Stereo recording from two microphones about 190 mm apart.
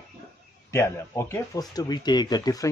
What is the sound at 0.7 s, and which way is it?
Speech, 15° left (ahead or behind).